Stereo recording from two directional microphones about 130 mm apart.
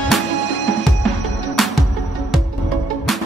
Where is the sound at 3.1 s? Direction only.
Centre (ahead or behind).